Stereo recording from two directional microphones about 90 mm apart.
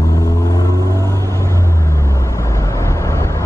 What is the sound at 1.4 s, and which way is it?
Vehicle, 30° left (ahead or behind).